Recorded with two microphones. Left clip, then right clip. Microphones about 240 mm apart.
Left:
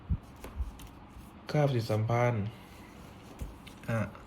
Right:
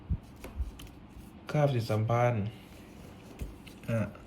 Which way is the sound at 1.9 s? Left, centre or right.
Left.